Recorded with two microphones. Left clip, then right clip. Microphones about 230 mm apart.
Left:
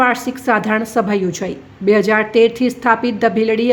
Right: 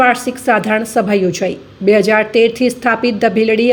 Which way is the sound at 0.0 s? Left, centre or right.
Centre.